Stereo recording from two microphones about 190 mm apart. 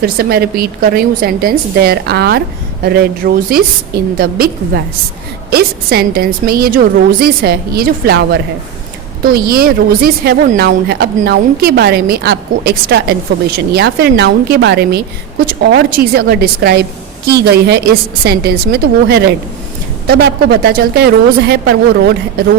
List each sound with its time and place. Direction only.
0.0 s a woman's voice: 55° right (ahead or behind)